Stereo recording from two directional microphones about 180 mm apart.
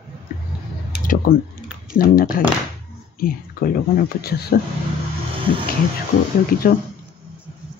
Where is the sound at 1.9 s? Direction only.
55° left (ahead or behind).